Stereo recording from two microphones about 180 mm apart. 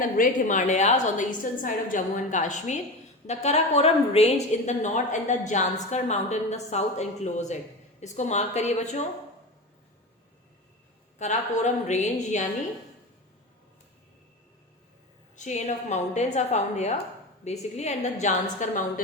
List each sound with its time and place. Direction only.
0.0 s a woman's voice: 50° left (ahead or behind)
11.2 s a woman's voice: 40° left (ahead or behind)
15.4 s a woman's voice: 40° left (ahead or behind)